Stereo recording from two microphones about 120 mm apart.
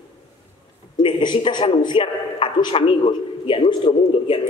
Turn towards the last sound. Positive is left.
turn(degrees=45)  # may be behind; listen again after turning